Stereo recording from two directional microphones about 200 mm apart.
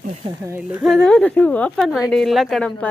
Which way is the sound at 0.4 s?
10° right (ahead or behind).